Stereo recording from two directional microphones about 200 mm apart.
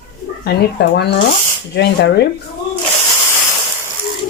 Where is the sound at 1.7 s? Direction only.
55° left (ahead or behind).